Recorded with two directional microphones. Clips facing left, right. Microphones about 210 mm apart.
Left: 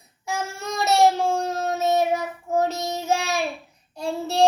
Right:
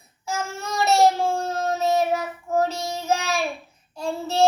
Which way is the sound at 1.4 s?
20° left (ahead or behind).